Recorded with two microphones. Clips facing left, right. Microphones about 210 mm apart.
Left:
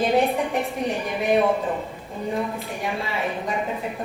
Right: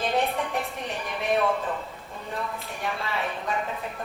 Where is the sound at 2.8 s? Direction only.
15° left (ahead or behind).